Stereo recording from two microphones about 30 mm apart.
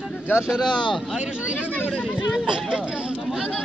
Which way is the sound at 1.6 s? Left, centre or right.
Left.